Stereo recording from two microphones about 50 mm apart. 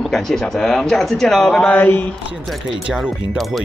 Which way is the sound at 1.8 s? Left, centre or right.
Left.